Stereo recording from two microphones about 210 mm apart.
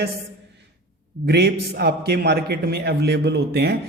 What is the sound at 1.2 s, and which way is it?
A man's voice, 50° right (ahead or behind).